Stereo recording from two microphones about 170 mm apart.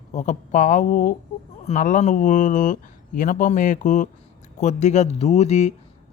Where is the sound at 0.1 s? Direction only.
45° left (ahead or behind).